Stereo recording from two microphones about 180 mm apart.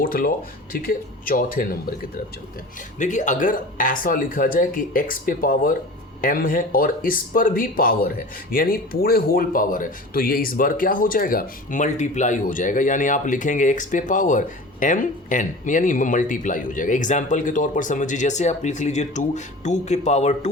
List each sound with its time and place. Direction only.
0.0 s speech: 55° left (ahead or behind)
3.0 s speech: 45° left (ahead or behind)